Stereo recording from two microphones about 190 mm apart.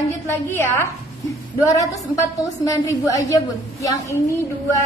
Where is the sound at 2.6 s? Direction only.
15° left (ahead or behind).